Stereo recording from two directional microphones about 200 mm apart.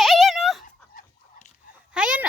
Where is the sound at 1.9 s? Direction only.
5° right (ahead or behind).